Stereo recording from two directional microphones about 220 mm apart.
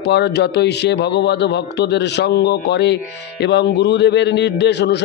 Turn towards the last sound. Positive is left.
turn(degrees=50)  # may be behind; listen again after turning